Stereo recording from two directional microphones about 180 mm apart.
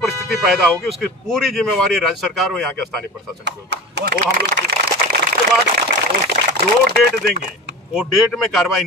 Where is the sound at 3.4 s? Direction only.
70° right (ahead or behind).